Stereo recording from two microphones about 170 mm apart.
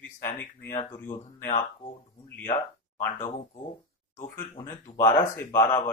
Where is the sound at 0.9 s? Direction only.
15° left (ahead or behind).